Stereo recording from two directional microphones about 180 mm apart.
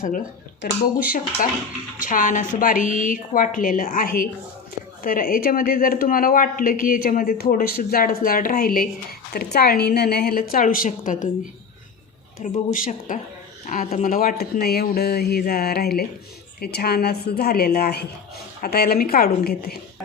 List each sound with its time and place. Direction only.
0.6 s speech: 50° left (ahead or behind)
12.4 s speech: 45° left (ahead or behind)